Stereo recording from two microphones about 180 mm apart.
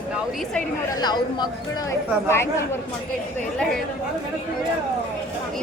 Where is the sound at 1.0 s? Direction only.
25° left (ahead or behind).